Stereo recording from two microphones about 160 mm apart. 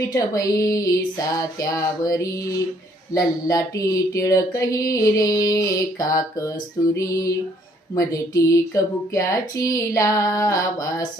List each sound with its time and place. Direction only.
0.1 s music: 20° left (ahead or behind)